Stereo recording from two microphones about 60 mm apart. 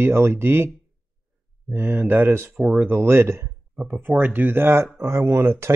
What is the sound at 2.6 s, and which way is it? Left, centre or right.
Speech, right.